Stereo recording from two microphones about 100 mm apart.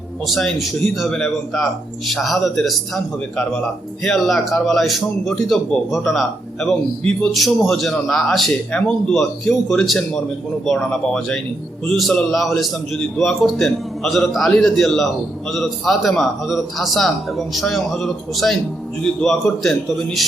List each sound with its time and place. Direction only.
0.3 s a man's voice: centre (ahead or behind)